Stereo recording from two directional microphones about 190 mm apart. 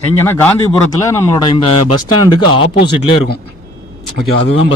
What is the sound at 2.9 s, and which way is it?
Speech, 25° left (ahead or behind).